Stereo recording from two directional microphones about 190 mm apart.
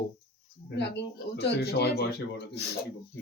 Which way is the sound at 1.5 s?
60° left (ahead or behind).